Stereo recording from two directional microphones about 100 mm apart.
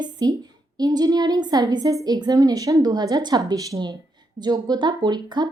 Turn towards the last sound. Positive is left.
turn(degrees=-50)  # may be behind; listen again after turning